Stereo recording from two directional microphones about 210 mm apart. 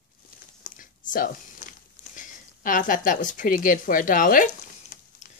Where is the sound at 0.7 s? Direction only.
40° left (ahead or behind).